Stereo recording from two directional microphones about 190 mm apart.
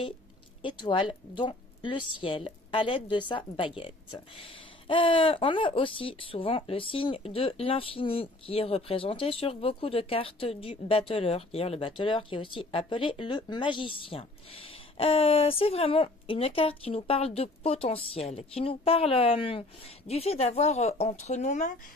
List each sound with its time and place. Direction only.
0.6 s speech: 25° left (ahead or behind); by 21.7 s 40° left (ahead or behind)